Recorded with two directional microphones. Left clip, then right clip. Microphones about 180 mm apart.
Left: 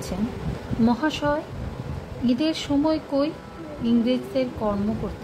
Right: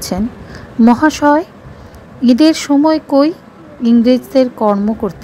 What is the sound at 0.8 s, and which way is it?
A woman's voice, 45° right (ahead or behind).